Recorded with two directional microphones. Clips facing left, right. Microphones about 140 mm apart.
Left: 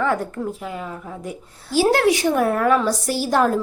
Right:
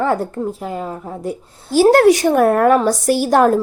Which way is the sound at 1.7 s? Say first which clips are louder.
Right 7 dB; 50° right (ahead or behind).